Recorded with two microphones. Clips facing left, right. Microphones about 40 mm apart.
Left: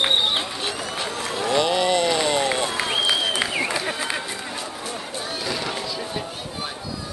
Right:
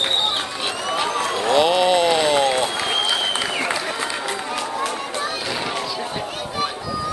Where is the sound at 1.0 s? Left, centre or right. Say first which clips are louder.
Right 6 dB; right.